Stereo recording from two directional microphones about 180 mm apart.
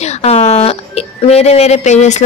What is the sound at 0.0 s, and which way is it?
Speech, 35° left (ahead or behind).